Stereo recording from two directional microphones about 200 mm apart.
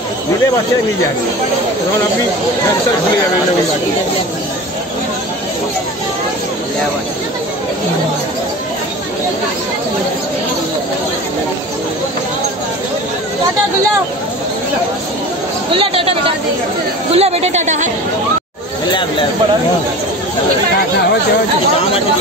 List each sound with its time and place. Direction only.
15.7 s a woman's voice: 25° right (ahead or behind)